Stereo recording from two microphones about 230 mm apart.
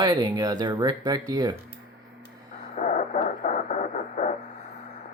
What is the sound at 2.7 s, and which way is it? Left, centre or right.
Radio, left.